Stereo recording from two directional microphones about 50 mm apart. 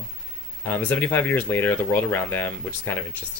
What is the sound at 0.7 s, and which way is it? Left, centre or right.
Speech, left.